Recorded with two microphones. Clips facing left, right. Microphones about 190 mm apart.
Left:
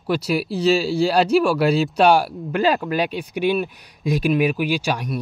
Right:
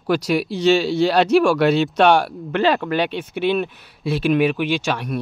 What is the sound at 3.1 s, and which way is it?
Speech, 10° left (ahead or behind).